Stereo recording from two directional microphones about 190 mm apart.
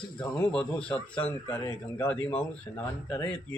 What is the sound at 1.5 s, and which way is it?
Speech, 20° left (ahead or behind).